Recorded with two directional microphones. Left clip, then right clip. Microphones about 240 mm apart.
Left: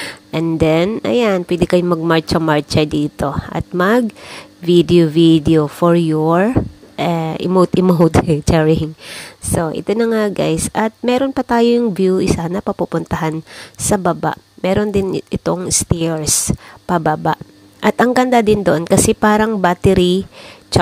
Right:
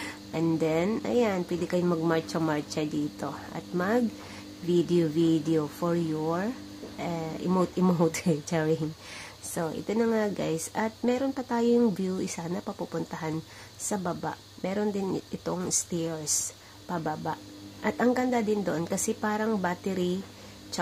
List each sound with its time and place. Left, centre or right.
0.0 s speech: left
7.0 s a sound: left
7.4 s speech: left
20.7 s throat clearing: left